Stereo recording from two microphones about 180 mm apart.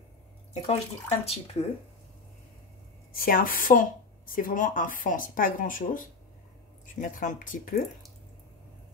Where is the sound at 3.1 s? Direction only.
50° left (ahead or behind).